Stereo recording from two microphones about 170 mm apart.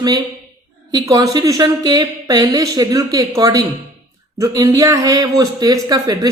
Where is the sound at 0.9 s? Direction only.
20° right (ahead or behind).